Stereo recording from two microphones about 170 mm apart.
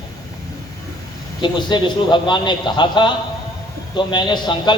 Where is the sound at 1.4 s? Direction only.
25° left (ahead or behind).